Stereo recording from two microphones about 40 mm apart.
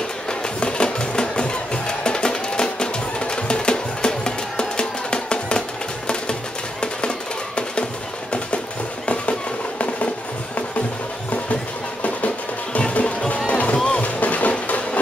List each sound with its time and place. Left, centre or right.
0.3 s music: left
6.8 s music: left
9.0 s a sound: left
12.7 s music: left
13.5 s music: left